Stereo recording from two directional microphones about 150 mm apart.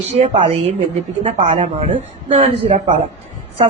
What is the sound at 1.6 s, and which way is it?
Speech, 40° right (ahead or behind).